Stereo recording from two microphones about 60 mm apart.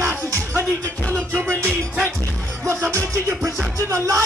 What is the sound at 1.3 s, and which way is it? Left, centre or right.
Music, right.